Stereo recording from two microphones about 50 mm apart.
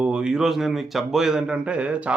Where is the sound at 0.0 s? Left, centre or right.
Centre.